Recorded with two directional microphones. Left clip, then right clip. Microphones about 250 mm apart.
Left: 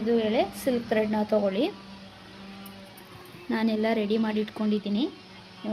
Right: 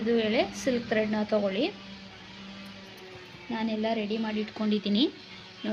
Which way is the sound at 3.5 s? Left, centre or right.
Left.